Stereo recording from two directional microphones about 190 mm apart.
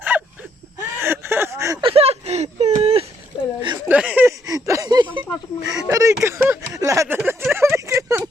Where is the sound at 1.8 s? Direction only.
30° right (ahead or behind).